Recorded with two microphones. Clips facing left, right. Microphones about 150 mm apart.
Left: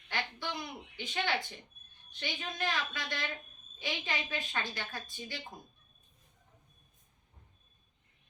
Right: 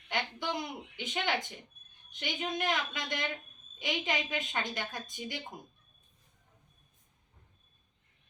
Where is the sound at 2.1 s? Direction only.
20° right (ahead or behind).